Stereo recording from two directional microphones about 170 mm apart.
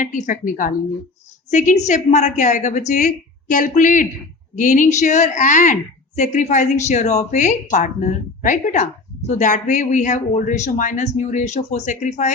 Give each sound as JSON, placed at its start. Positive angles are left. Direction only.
{"t": 0.0, "sound": "speech", "side_deg": 50}